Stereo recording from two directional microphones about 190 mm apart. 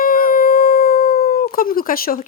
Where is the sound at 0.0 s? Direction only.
50° left (ahead or behind).